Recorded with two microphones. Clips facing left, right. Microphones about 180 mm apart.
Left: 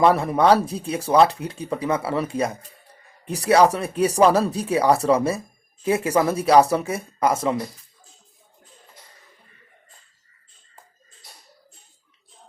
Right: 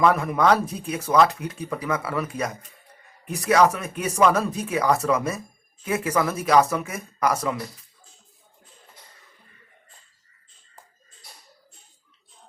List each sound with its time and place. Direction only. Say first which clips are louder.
0.0 s speech: left 3 dB; 30° left (ahead or behind)